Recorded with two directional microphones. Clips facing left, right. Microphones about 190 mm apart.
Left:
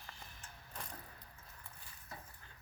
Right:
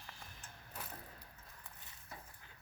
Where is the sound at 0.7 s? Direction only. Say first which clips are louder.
Even; 5° right (ahead or behind).